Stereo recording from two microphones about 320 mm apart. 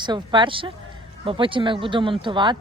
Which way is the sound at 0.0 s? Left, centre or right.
Centre.